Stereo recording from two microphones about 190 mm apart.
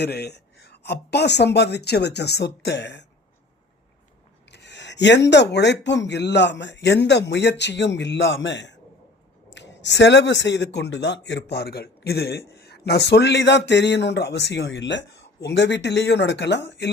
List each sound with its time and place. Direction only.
0.0 s speech: 60° left (ahead or behind)
4.5 s a sound: 65° left (ahead or behind)
5.3 s speech: 65° left (ahead or behind)